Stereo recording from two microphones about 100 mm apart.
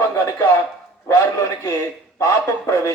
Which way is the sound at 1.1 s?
30° left (ahead or behind).